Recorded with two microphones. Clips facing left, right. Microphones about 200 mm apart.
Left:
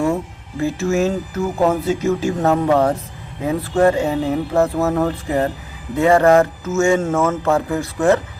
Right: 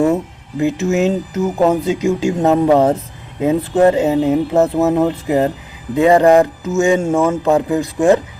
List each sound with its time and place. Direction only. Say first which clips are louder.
0.0 s speech: right 5 dB; 20° right (ahead or behind)